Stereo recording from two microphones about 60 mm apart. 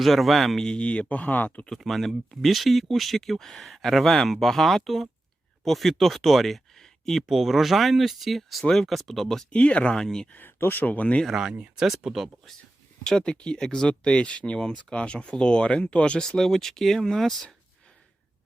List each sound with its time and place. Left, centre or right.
0.0 s speech: centre; by 1.6 s left
1.8 s speech: centre
7.3 s speech: centre
9.5 s speech: left
10.3 s speech: left
11.8 s speech: centre
13.1 s speech: centre